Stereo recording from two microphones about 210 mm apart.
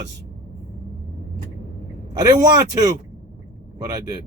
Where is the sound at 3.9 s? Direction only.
15° right (ahead or behind).